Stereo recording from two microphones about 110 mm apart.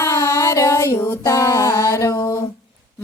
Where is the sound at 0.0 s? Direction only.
30° left (ahead or behind).